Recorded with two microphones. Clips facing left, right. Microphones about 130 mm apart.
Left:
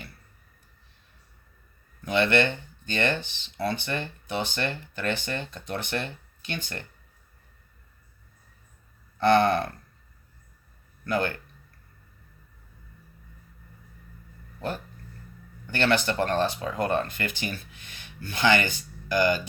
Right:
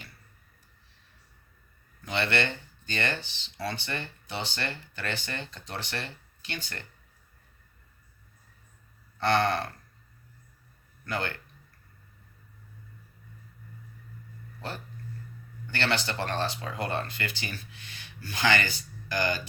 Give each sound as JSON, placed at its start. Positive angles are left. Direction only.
{"t": 2.0, "sound": "speech", "side_deg": 50}
{"t": 9.1, "sound": "speech", "side_deg": 50}
{"t": 11.0, "sound": "speech", "side_deg": 50}
{"t": 15.6, "sound": "speech", "side_deg": 50}